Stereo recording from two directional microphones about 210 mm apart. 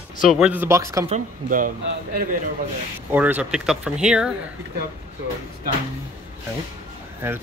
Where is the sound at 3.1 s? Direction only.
5° right (ahead or behind).